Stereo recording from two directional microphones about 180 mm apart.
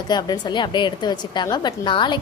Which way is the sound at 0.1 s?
25° left (ahead or behind).